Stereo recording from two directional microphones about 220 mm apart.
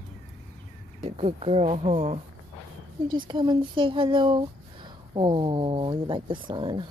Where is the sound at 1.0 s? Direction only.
25° right (ahead or behind).